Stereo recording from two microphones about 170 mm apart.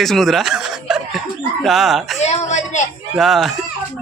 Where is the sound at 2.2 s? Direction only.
40° left (ahead or behind).